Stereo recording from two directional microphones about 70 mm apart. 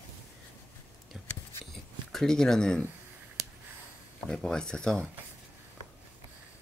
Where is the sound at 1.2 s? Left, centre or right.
Centre.